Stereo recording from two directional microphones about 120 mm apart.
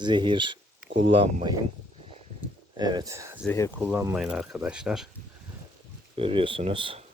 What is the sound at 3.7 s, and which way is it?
Speech, 15° right (ahead or behind).